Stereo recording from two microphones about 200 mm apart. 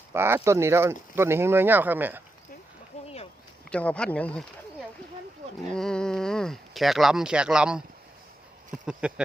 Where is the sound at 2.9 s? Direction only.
30° left (ahead or behind).